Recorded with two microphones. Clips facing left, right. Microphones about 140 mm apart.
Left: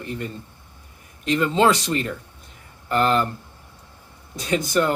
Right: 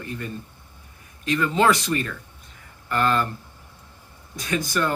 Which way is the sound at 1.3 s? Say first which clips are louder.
Left 2 dB; 25° left (ahead or behind).